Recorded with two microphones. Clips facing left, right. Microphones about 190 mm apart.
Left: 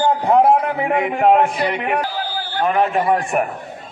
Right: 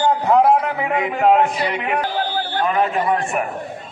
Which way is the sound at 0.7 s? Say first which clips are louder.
Left 2 dB; 55° left (ahead or behind).